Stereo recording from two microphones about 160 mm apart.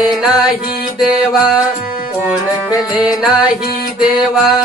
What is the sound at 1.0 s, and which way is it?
Music, 5° right (ahead or behind).